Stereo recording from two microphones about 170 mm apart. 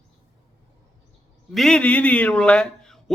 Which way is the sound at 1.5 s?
Centre (ahead or behind).